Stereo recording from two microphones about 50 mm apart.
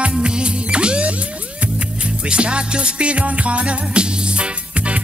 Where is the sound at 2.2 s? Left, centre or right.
Right.